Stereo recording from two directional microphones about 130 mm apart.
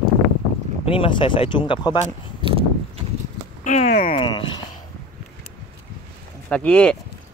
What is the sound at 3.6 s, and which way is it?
Speech, 60° left (ahead or behind).